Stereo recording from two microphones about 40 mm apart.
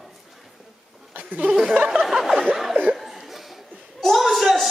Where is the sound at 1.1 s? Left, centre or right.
Right.